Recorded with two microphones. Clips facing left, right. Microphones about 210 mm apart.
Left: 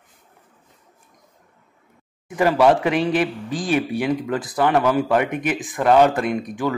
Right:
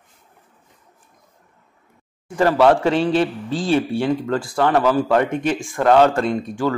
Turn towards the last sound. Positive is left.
turn(degrees=15)  # may be behind; listen again after turning